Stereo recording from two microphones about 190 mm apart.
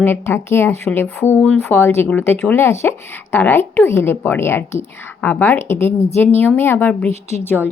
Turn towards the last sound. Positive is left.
turn(degrees=-5)  # may be behind; listen again after turning